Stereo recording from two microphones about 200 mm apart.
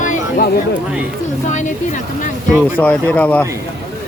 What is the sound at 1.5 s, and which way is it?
Speech, 35° left (ahead or behind).